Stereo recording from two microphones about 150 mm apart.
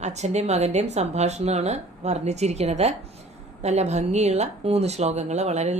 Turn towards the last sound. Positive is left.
turn(degrees=-50)  # may be behind; listen again after turning